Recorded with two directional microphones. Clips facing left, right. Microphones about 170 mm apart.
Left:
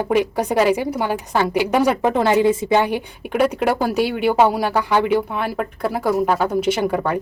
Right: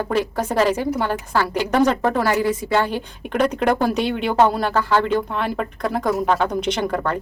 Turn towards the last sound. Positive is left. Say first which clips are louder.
# left 3 dB
turn(degrees=10)  # may be behind; listen again after turning